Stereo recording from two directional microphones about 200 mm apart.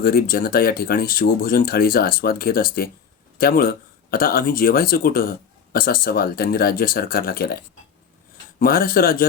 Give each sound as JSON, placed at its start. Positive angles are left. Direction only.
{"t": 0.0, "sound": "speech", "side_deg": 50}